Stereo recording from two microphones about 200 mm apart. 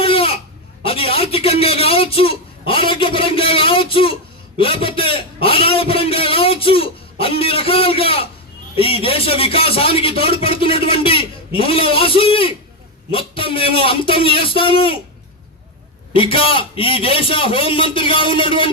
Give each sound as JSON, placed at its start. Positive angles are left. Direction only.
{"t": 0.0, "sound": "a sound", "side_deg": 25}
{"t": 4.5, "sound": "a man's voice", "side_deg": 25}
{"t": 16.1, "sound": "speech", "side_deg": 25}